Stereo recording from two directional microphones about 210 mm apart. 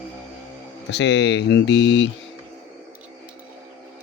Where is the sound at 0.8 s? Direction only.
55° left (ahead or behind).